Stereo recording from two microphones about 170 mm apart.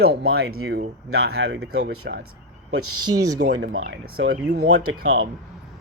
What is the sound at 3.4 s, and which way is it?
Speech, 90° right.